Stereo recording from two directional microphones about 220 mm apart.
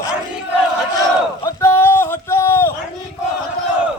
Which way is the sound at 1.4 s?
10° left (ahead or behind).